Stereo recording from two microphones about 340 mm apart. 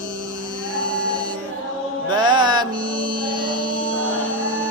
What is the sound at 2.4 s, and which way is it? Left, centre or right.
Music, centre.